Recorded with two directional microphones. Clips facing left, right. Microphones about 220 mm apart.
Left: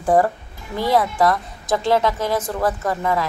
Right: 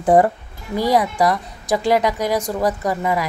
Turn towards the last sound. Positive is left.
turn(degrees=-15)  # may be behind; listen again after turning